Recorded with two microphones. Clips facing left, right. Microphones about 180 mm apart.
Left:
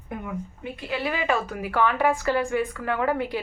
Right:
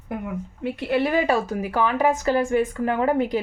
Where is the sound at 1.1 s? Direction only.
40° right (ahead or behind).